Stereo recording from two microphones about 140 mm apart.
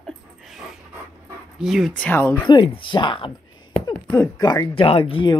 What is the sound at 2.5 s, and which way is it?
Speech, 35° left (ahead or behind).